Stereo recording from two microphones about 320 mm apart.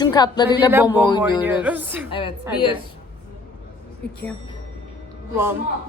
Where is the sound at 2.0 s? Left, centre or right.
Centre.